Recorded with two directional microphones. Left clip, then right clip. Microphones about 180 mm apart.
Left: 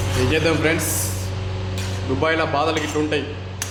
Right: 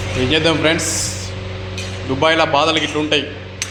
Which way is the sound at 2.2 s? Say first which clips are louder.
Right 6 dB; 10° right (ahead or behind).